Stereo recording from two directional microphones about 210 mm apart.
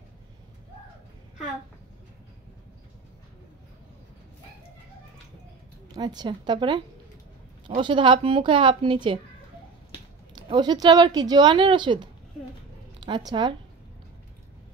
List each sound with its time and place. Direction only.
5.9 s a woman's voice: 20° right (ahead or behind)
10.3 s a woman's voice: 20° right (ahead or behind)